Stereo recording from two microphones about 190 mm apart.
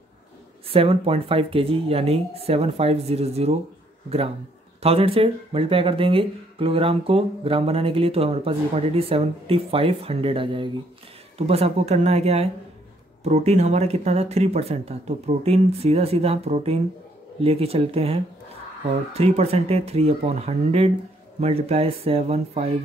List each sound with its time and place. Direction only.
0.7 s speech: 30° right (ahead or behind)
4.8 s speech: 30° right (ahead or behind)